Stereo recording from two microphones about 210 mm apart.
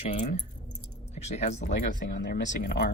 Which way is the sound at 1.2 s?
30° left (ahead or behind).